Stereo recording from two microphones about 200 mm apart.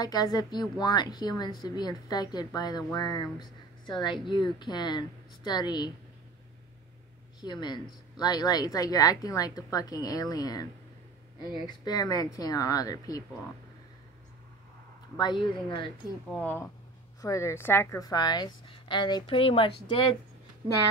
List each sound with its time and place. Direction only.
0.0 s speech: 20° left (ahead or behind)
7.3 s speech: 20° left (ahead or behind)
15.1 s speech: 20° left (ahead or behind)
16.3 s speech: 5° left (ahead or behind); by 20.0 s 25° left (ahead or behind)